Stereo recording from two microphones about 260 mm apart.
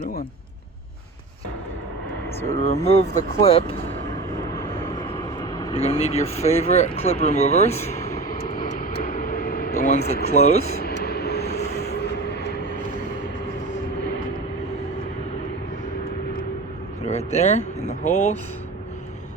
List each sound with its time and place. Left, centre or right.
0.0 s speech: left
2.6 s speech: left
5.4 s speech: centre
7.9 s vehicle: centre
8.3 s vehicle: left
10.2 s speech: left
10.8 s a sound: left
11.5 s vehicle: left
12.3 s vehicle: left
17.1 s vehicle: left
17.8 s speech: left